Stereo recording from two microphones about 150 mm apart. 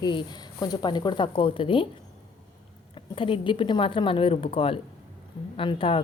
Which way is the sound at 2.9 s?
35° left (ahead or behind).